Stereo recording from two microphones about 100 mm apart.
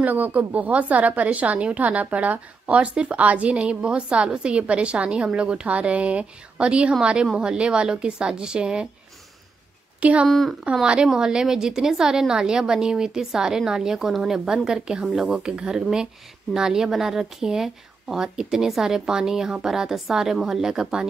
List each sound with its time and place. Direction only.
0.0 s a woman's voice: 15° right (ahead or behind)
9.9 s speech: 15° right (ahead or behind)
10.2 s speech: centre (ahead or behind)
10.6 s a woman's voice: 10° right (ahead or behind)